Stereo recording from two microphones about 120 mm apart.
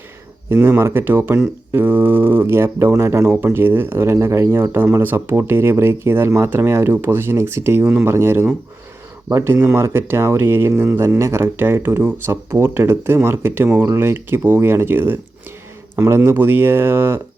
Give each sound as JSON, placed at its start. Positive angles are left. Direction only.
{"t": 0.5, "sound": "speech", "side_deg": -20}